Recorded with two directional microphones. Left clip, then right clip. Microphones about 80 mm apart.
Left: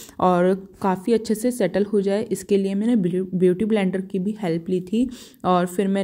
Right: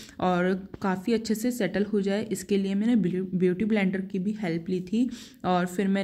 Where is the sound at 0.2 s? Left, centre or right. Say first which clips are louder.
Left 7 dB; left.